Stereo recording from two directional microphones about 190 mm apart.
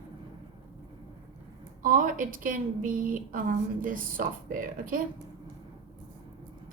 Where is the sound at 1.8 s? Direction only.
45° right (ahead or behind).